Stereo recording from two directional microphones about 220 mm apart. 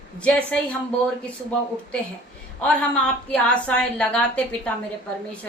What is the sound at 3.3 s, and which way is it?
A woman's voice, 5° left (ahead or behind).